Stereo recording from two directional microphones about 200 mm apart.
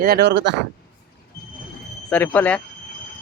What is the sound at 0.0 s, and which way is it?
Speech, 55° right (ahead or behind).